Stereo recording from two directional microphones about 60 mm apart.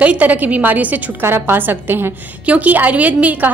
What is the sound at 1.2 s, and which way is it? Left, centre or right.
Speech, right.